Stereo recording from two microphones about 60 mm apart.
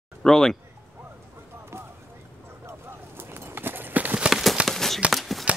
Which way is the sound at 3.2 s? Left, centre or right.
Right.